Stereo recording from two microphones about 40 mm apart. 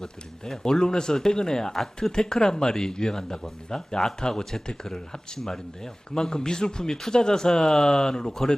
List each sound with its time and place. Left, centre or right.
0.0 s speech: centre